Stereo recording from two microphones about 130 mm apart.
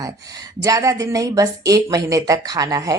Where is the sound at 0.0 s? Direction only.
25° right (ahead or behind).